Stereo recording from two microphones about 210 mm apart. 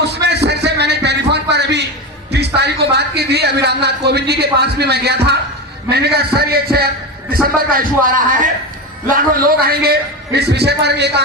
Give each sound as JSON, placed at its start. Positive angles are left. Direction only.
{"t": 0.0, "sound": "a sound", "side_deg": -55}
{"t": 5.9, "sound": "a man's voice", "side_deg": -50}
{"t": 9.6, "sound": "a man's voice", "side_deg": -45}